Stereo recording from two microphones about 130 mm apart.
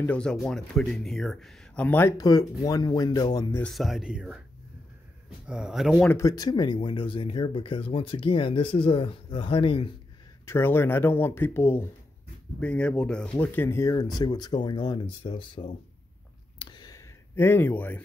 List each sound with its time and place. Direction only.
0.0 s speech: 10° left (ahead or behind)
2.1 s speech: 30° left (ahead or behind)
3.6 s speech: centre (ahead or behind)
5.5 s speech: 5° right (ahead or behind)
6.0 s speech: 25° left (ahead or behind); by 9.9 s 40° left (ahead or behind)
10.4 s speech: 20° left (ahead or behind); by 15.6 s 40° left (ahead or behind)
16.5 s a sound: 35° left (ahead or behind)
17.4 s speech: 15° left (ahead or behind)